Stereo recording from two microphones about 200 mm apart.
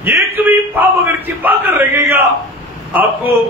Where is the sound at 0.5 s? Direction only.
10° right (ahead or behind).